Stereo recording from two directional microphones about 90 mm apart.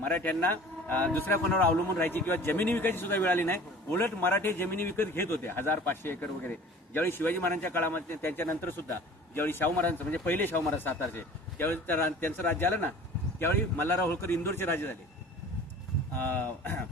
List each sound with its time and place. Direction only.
0.0 s speech: 20° left (ahead or behind)
16.2 s speech: 20° left (ahead or behind)